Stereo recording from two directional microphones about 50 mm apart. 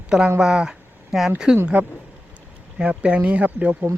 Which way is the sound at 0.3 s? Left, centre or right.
Centre.